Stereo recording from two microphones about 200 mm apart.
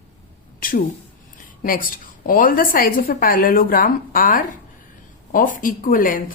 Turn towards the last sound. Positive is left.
turn(degrees=45)  # may be behind; listen again after turning